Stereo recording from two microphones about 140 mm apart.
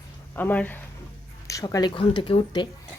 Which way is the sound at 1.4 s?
25° left (ahead or behind).